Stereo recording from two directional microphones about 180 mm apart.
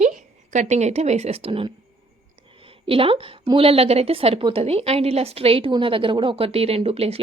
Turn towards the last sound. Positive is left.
turn(degrees=-35)  # may be behind; listen again after turning